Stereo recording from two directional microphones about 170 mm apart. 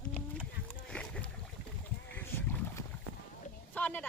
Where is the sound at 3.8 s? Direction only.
10° left (ahead or behind).